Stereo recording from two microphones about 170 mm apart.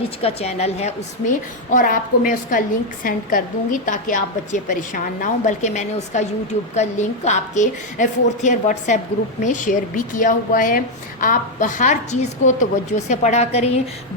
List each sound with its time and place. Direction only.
0.2 s a woman's voice: 35° left (ahead or behind)